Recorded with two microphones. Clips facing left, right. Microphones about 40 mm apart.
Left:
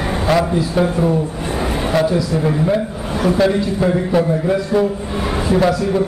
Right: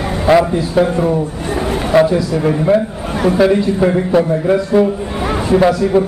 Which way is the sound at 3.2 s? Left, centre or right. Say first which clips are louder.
Right 4 dB; centre.